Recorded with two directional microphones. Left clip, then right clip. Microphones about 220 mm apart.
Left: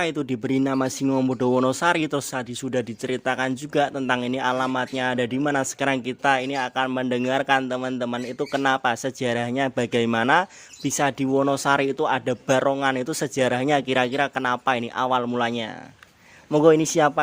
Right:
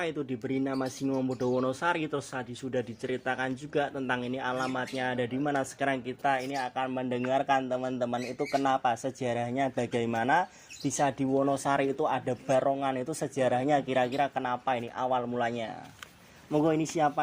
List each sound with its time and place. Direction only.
0.0 s speech: 50° left (ahead or behind)